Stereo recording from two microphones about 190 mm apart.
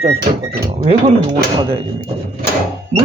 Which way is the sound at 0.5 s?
55° right (ahead or behind).